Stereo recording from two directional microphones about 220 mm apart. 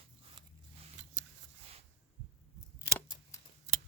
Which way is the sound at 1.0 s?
55° right (ahead or behind).